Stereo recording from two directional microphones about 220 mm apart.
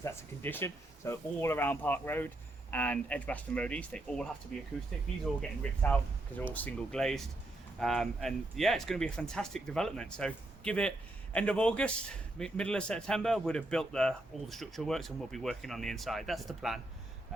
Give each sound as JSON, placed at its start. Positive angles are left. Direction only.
{"t": 0.0, "sound": "speech", "side_deg": 10}